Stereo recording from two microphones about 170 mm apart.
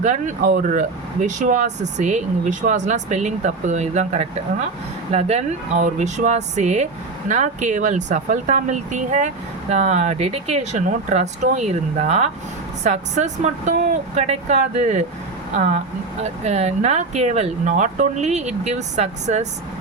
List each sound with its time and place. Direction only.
0.0 s speech: 45° right (ahead or behind)